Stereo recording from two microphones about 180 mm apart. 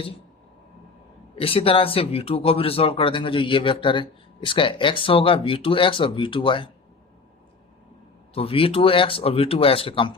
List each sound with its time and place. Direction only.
1.4 s speech: 30° left (ahead or behind)
8.3 s speech: 30° left (ahead or behind)